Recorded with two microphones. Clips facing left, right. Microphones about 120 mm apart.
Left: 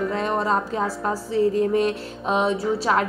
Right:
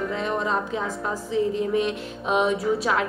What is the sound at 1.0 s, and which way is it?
A woman's voice, 40° left (ahead or behind).